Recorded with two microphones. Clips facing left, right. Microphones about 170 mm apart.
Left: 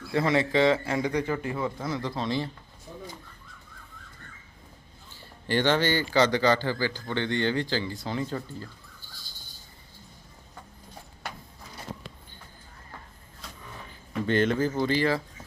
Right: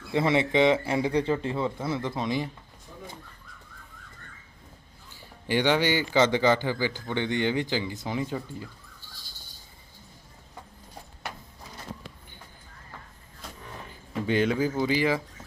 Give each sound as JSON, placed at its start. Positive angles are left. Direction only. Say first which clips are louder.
{"t": 0.1, "sound": "speech", "louder": "right 1 dB", "side_deg": -20}
{"t": 5.1, "sound": "speech", "louder": "even", "side_deg": -15}
{"t": 14.1, "sound": "speech", "louder": "even", "side_deg": -10}